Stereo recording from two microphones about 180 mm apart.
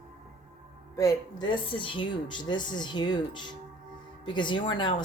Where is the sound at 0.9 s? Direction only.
20° left (ahead or behind).